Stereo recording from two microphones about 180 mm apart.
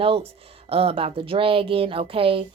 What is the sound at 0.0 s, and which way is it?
A woman's voice, 30° right (ahead or behind).